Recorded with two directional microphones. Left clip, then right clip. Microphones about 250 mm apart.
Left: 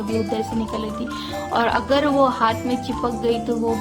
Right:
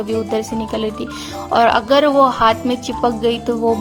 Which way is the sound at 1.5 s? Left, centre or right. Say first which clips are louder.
Right 7 dB; right.